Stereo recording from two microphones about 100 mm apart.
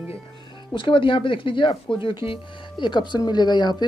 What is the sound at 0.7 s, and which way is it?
Speech, 60° left (ahead or behind).